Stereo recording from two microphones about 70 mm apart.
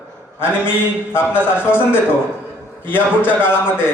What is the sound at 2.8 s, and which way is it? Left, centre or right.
Speech, left.